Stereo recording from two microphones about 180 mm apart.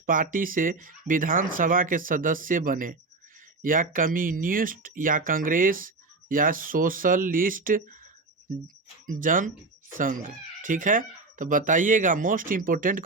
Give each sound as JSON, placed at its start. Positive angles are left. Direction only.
{"t": 0.0, "sound": "speech", "side_deg": -50}
{"t": 9.0, "sound": "speech", "side_deg": -45}